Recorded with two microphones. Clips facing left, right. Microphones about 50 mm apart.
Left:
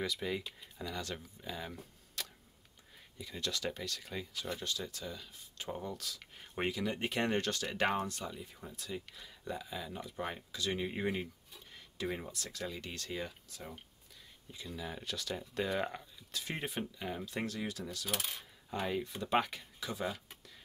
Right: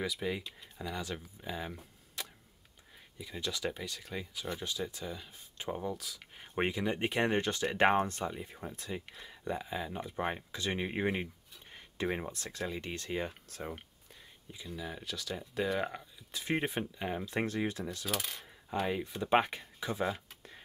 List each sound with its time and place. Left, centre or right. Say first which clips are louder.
0.0 s speech: right 1 dB; centre; by 13.3 s right
13.3 s speech: right 6 dB; right
14.5 s speech: right 1 dB; centre
16.3 s speech: right 7 dB; right
18.9 s speech: right 1 dB; centre
19.1 s speech: right 6 dB; right